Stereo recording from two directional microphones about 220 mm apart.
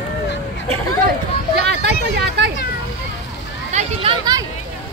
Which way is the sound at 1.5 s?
50° right (ahead or behind).